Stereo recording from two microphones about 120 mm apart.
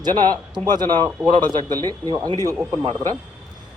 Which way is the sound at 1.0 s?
35° right (ahead or behind).